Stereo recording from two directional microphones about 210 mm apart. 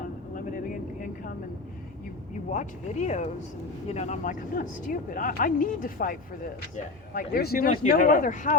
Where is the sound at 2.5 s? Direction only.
35° left (ahead or behind).